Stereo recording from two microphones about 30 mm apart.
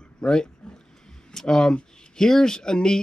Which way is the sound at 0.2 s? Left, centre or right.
Left.